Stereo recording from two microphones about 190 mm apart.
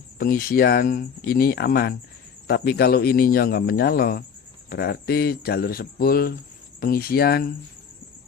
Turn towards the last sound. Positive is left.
turn(degrees=55)  # may be behind; listen again after turning